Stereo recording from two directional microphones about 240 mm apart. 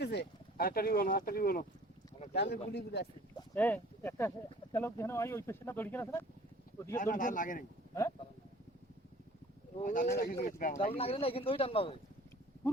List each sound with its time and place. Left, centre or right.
0.0 s speech: left
3.3 s speech: centre
6.9 s speech: left
9.7 s speech: left